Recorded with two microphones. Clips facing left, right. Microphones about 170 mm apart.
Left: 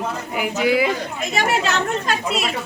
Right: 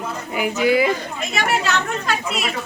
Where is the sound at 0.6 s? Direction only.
5° left (ahead or behind).